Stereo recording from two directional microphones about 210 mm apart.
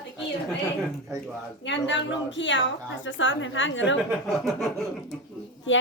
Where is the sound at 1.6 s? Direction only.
60° left (ahead or behind).